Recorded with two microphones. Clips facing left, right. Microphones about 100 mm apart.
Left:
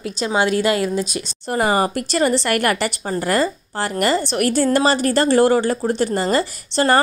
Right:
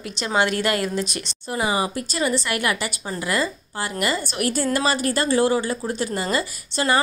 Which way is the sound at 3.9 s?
35° left (ahead or behind).